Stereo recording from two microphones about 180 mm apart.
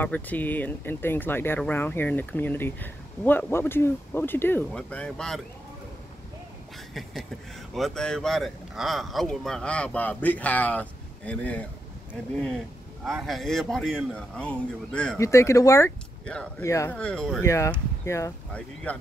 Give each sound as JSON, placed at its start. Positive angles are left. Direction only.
{"t": 0.0, "sound": "speech", "side_deg": 10}
{"t": 6.9, "sound": "a sound", "side_deg": 0}
{"t": 7.7, "sound": "speech", "side_deg": 0}
{"t": 13.0, "sound": "speech", "side_deg": 0}
{"t": 15.1, "sound": "speech", "side_deg": 15}
{"t": 16.3, "sound": "speech", "side_deg": 5}
{"t": 16.6, "sound": "speech", "side_deg": 15}
{"t": 17.0, "sound": "speech", "side_deg": 5}
{"t": 17.5, "sound": "speech", "side_deg": 15}